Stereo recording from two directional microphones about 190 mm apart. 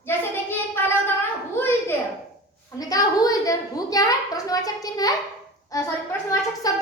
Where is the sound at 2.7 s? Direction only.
20° left (ahead or behind).